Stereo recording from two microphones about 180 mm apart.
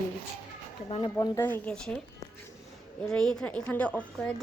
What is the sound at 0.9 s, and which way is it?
Speech, 30° left (ahead or behind).